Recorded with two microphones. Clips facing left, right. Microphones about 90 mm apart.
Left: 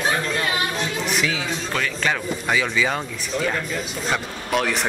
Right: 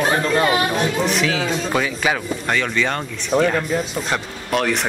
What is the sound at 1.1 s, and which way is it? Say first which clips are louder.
Speech: right 4 dB; centre (ahead or behind).